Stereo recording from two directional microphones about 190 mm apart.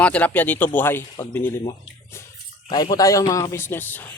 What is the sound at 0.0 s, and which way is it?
Speech, 10° left (ahead or behind).